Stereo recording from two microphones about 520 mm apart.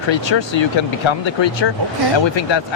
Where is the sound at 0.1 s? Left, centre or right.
Left.